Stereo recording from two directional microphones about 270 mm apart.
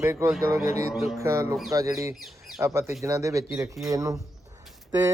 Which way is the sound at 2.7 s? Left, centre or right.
Centre.